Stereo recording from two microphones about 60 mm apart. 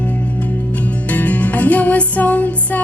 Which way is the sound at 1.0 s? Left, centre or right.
Left.